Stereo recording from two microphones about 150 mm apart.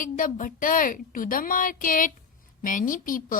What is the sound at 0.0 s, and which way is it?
A woman's voice, 60° left (ahead or behind).